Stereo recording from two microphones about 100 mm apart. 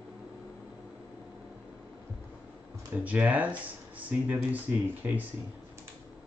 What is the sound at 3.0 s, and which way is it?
Speech, 15° right (ahead or behind).